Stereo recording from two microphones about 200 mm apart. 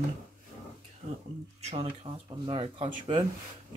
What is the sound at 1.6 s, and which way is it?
Speech, 30° right (ahead or behind).